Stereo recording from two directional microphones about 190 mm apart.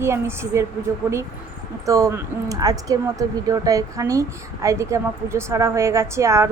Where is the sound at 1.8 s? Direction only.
15° right (ahead or behind).